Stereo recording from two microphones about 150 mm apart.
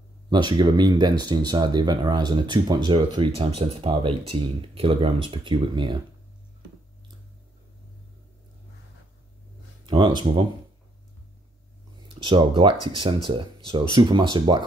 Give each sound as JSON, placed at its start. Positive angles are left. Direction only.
{"t": 0.3, "sound": "speech", "side_deg": -30}
{"t": 9.8, "sound": "speech", "side_deg": -30}
{"t": 12.1, "sound": "speech", "side_deg": -35}